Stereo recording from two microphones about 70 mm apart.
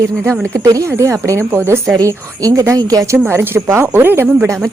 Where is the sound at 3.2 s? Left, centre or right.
Right.